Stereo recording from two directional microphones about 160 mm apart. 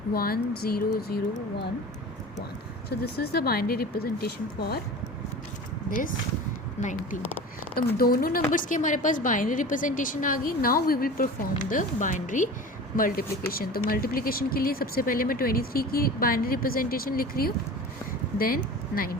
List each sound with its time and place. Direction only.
0.1 s speech: 70° left (ahead or behind)
3.0 s speech: 80° left
5.9 s a woman's voice: 55° left (ahead or behind)
7.8 s a woman's voice: 70° left (ahead or behind)
11.7 s a woman's voice: 55° left (ahead or behind)